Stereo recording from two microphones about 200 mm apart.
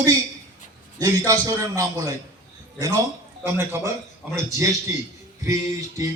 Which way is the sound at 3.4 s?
10° right (ahead or behind).